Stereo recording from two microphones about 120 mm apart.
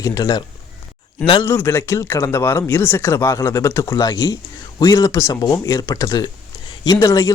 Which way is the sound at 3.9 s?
35° left (ahead or behind).